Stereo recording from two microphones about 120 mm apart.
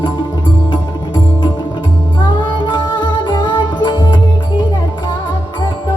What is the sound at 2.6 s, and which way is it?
Music, 40° left (ahead or behind).